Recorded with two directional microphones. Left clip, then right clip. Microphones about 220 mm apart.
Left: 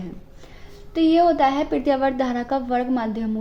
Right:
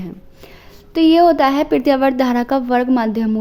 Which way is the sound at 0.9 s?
50° right (ahead or behind).